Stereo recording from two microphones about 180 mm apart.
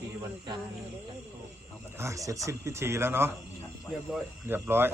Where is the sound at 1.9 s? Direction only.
15° right (ahead or behind).